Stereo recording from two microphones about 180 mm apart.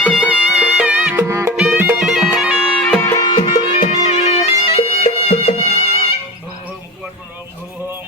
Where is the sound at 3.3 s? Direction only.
30° left (ahead or behind).